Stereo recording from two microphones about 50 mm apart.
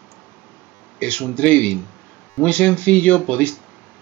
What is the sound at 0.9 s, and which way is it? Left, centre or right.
Speech, left.